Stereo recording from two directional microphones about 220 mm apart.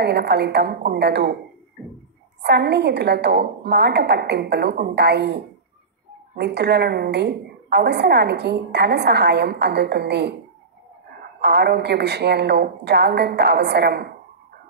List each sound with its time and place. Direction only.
0.0 s a woman's voice: 50° right (ahead or behind)
2.4 s a woman's voice: 50° right (ahead or behind)
11.4 s a woman's voice: 50° right (ahead or behind)